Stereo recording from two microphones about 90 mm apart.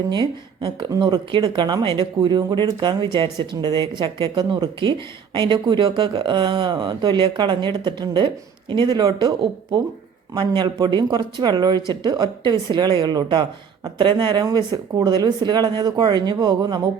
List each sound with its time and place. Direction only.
0.1 s speech: 60° right (ahead or behind)
10.3 s speech: 60° right (ahead or behind)
14.0 s speech: 60° right (ahead or behind)
14.4 s speech: 50° right (ahead or behind)